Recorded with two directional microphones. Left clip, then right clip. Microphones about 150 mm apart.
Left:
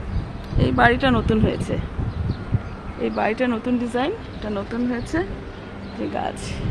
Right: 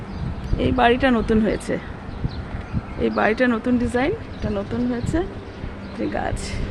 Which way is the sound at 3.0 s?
25° right (ahead or behind).